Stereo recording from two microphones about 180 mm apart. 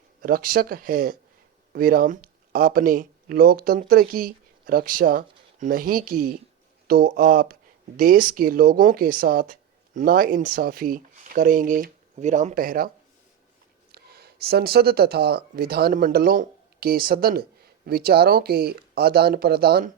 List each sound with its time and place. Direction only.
0.2 s speech: 55° right (ahead or behind)
13.9 s speech: 60° right (ahead or behind)